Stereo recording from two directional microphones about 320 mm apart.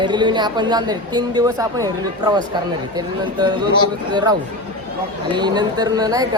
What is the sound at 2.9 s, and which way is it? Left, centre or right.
A man's voice, centre.